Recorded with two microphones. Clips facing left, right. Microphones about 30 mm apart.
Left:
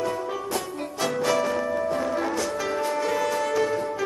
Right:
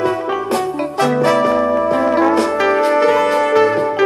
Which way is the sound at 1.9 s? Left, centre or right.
Right.